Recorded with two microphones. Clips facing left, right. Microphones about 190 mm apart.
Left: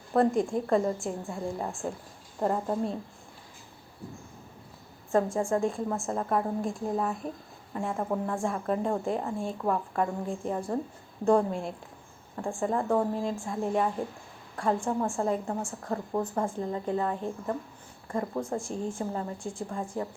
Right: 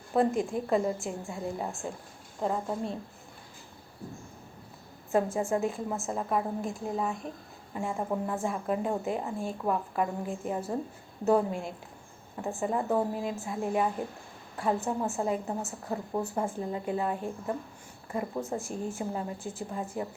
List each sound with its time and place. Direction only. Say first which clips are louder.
0.1 s a woman's voice: left 2 dB; centre (ahead or behind)
5.1 s a woman's voice: left 1 dB; 5° right (ahead or behind)